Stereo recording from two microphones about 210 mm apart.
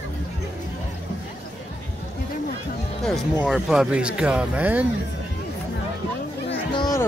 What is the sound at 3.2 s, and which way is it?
Speech, centre (ahead or behind).